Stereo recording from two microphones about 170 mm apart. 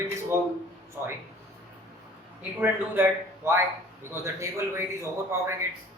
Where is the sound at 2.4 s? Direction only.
10° right (ahead or behind).